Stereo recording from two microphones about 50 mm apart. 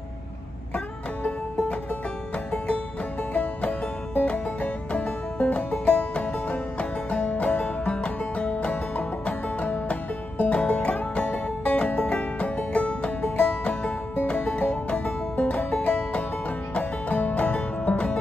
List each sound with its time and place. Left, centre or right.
0.7 s music: left